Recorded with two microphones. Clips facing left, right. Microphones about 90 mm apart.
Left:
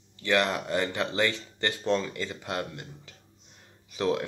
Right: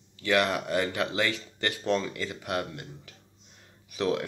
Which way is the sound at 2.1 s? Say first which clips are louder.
Even; 25° left (ahead or behind).